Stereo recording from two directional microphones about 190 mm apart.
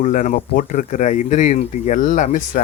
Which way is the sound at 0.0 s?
40° left (ahead or behind).